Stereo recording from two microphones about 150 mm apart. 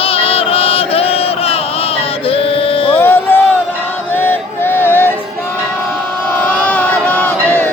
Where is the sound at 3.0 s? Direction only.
15° left (ahead or behind).